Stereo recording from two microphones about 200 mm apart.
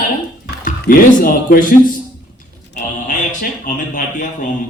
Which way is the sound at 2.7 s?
40° left (ahead or behind).